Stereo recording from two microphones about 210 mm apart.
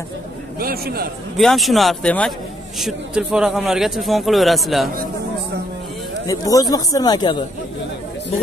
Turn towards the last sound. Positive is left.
turn(degrees=20)  # may be behind; listen again after turning